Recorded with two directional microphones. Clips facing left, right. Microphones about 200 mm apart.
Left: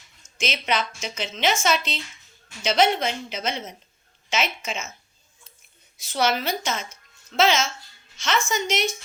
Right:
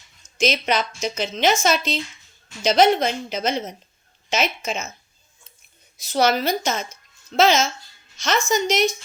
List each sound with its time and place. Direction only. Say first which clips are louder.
0.2 s a woman's voice: right 8 dB; 40° right (ahead or behind)
6.0 s a woman's voice: right 4 dB; 40° right (ahead or behind)